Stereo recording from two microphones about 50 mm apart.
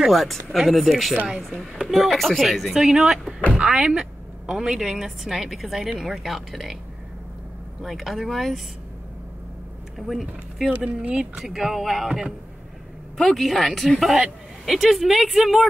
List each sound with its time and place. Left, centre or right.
0.0 s speech: centre
1.3 s speech: centre
1.9 s speech: centre
3.5 s a sound: centre
4.6 s speech: centre
7.8 s speech: centre
9.9 s speech: centre
10.7 s speech: right
11.5 s speech: centre
13.2 s speech: centre